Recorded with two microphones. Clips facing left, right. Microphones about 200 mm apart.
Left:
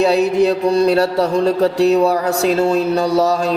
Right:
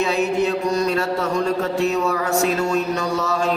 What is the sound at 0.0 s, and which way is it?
Music, 35° left (ahead or behind).